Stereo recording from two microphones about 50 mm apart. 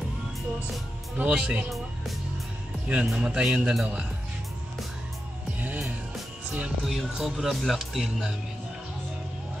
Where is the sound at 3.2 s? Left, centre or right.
Centre.